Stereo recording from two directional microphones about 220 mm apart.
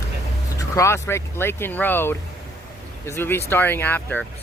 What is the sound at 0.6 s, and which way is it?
Speech, 15° left (ahead or behind).